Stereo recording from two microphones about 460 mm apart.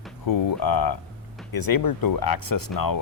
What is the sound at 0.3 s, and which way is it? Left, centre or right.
Speech, left.